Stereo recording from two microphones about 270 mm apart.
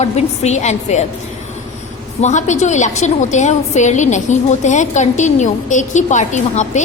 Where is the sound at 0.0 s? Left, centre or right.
Left.